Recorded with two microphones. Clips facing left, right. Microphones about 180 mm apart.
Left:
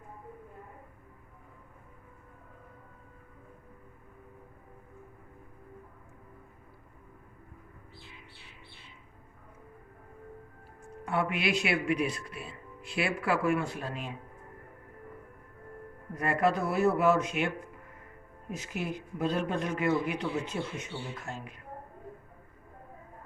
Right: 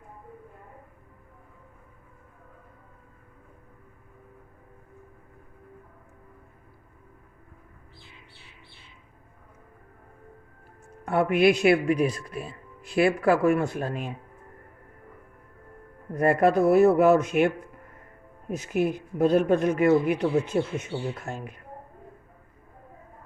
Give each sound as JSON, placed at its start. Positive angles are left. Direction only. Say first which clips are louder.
{"t": 11.0, "sound": "speech", "louder": "right 10 dB", "side_deg": -50}
{"t": 16.1, "sound": "speech", "louder": "right 8 dB", "side_deg": -50}